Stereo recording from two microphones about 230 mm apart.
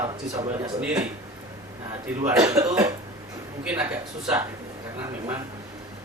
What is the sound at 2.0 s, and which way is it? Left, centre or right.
Speech, centre.